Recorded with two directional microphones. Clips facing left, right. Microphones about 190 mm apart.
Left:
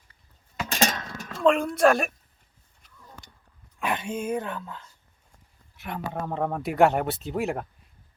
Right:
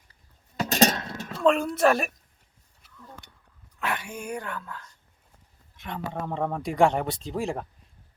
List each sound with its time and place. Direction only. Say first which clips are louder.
0.6 s a sound: right 4 dB; 40° right (ahead or behind)
1.3 s speech: left 1 dB; centre (ahead or behind)
3.8 s speech: left 3 dB; 20° left (ahead or behind)
5.7 s speech: left 1 dB; 5° left (ahead or behind)